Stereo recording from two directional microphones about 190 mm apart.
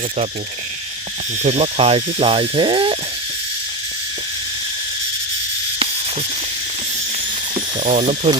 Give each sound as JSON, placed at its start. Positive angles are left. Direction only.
{"t": 1.4, "sound": "speech", "side_deg": -35}
{"t": 7.9, "sound": "speech", "side_deg": -35}